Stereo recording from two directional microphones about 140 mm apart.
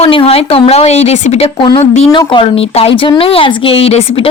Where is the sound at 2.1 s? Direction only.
35° left (ahead or behind).